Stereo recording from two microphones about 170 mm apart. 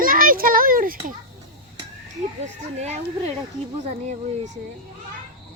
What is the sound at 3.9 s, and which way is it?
Speech, 45° right (ahead or behind).